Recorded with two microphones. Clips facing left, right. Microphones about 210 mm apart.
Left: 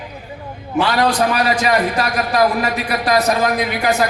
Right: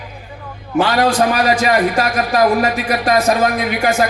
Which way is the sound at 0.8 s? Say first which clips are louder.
Right 2 dB; 45° right (ahead or behind).